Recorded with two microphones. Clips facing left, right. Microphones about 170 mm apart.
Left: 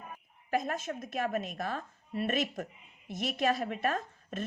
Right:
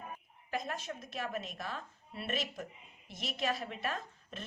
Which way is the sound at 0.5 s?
50° left (ahead or behind).